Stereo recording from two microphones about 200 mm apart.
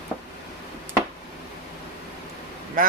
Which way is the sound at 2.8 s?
40° right (ahead or behind).